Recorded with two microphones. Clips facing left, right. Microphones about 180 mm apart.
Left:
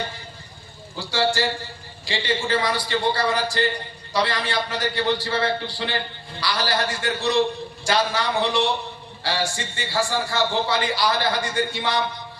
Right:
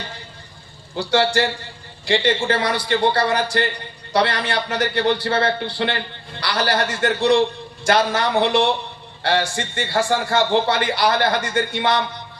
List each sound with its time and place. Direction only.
1.1 s a man's voice: 60° right (ahead or behind)